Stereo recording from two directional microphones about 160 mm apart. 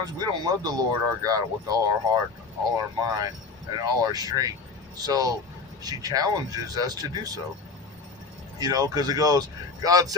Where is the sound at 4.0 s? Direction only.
25° right (ahead or behind).